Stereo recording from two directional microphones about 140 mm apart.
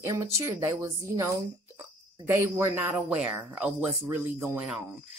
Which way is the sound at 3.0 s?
10° right (ahead or behind).